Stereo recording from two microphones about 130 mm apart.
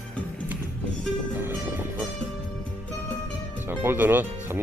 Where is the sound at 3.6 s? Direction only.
15° right (ahead or behind).